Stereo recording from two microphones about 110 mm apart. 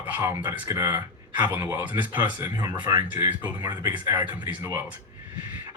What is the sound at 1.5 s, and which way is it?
Speech, 20° right (ahead or behind).